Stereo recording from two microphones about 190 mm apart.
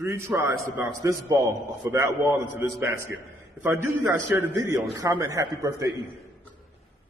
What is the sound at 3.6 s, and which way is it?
A man's voice, 15° right (ahead or behind).